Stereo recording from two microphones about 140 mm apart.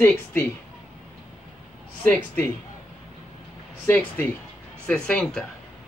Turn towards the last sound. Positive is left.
turn(degrees=5)  # may be behind; listen again after turning